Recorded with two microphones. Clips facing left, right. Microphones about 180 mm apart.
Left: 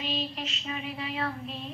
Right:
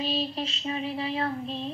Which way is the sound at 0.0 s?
35° right (ahead or behind).